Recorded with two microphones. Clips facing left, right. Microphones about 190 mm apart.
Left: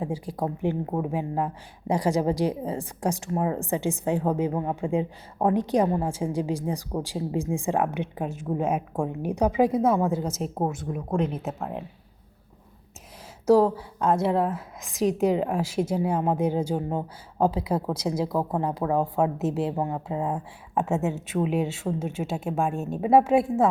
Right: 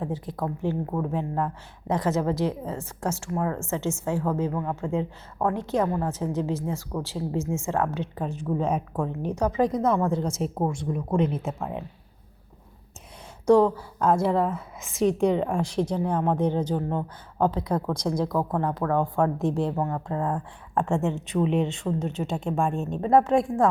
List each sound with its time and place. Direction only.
0.0 s a woman's voice: 10° left (ahead or behind)
13.4 s a woman's voice: 5° left (ahead or behind)